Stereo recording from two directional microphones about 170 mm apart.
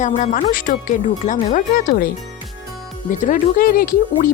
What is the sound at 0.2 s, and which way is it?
Speech, 50° left (ahead or behind).